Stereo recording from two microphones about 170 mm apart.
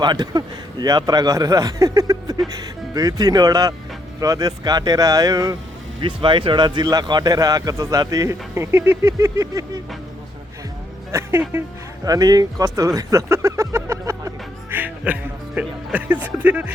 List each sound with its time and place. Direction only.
0.0 s speech: 25° right (ahead or behind)
11.1 s speech: 15° right (ahead or behind)